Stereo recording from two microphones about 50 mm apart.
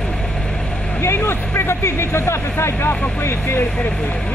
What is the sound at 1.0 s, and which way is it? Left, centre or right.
Speech, left.